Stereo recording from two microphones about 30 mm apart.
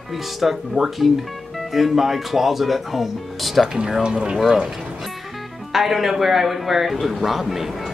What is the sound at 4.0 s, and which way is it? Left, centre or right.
Speech, right.